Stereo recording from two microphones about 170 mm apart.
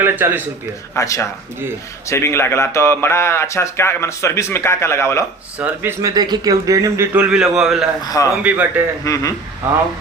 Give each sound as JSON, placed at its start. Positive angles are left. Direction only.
{"t": 0.0, "sound": "a man's voice", "side_deg": -10}
{"t": 0.9, "sound": "a man's voice", "side_deg": 20}
{"t": 5.5, "sound": "speech", "side_deg": -10}
{"t": 8.0, "sound": "a man's voice", "side_deg": 20}
{"t": 8.4, "sound": "speech", "side_deg": -10}
{"t": 9.0, "sound": "a man's voice", "side_deg": 20}